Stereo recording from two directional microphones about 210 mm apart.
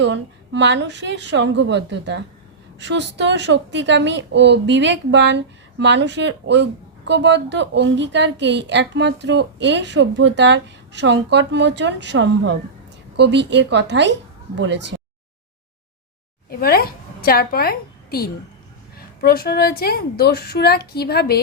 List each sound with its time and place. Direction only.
0.0 s a woman's voice: 60° right (ahead or behind)
16.5 s a woman's voice: 45° left (ahead or behind)